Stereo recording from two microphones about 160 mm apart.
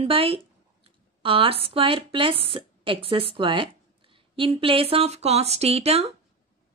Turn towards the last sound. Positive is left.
turn(degrees=-40)  # may be behind; listen again after turning